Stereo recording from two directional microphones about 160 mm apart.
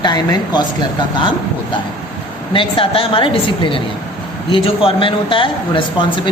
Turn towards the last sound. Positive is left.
turn(degrees=30)  # may be behind; listen again after turning